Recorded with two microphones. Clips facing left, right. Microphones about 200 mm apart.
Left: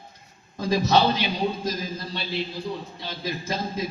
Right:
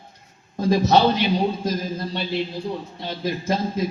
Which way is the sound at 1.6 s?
55° right (ahead or behind).